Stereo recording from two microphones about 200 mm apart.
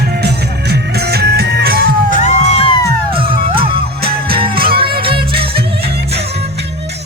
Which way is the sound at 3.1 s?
25° right (ahead or behind).